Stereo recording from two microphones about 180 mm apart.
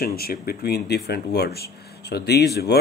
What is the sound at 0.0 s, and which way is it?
Speech, 60° left (ahead or behind).